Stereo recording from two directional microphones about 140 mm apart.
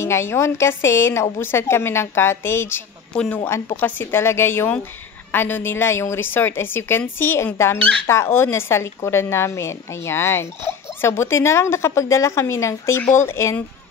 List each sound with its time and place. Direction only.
0.0 s a woman's voice: 20° left (ahead or behind)
3.1 s speech: 5° left (ahead or behind)
3.4 s a woman's voice: 20° left (ahead or behind)